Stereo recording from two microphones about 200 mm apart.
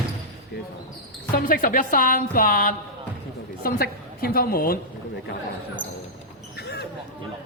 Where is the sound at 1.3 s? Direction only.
45° left (ahead or behind).